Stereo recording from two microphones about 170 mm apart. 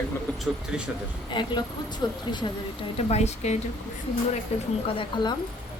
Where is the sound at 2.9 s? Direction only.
40° left (ahead or behind).